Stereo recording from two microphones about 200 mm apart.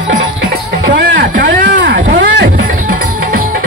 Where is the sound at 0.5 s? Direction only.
50° right (ahead or behind).